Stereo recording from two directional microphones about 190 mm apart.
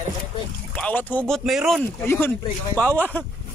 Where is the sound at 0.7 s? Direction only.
5° left (ahead or behind).